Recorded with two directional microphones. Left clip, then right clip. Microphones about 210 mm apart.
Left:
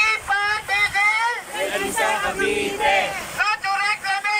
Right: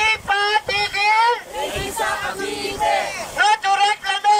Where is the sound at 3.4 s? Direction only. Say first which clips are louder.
Right 6 dB; 35° right (ahead or behind).